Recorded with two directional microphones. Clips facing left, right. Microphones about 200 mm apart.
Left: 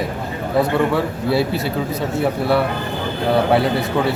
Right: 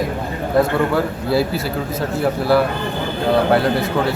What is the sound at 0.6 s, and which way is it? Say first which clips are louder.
A man's voice: right 1 dB; centre (ahead or behind).